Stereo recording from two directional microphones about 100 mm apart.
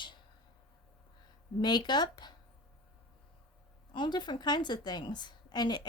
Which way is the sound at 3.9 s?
50° left (ahead or behind).